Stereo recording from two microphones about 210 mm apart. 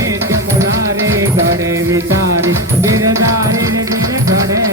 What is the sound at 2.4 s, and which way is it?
Music, 15° right (ahead or behind).